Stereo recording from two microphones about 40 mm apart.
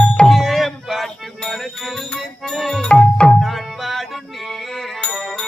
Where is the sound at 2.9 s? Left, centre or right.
Left.